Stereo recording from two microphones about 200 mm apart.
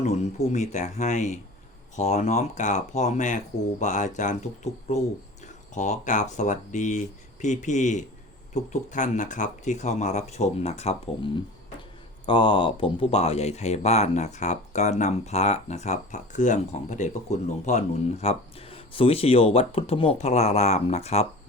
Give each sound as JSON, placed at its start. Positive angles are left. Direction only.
{"t": 0.0, "sound": "speech", "side_deg": 35}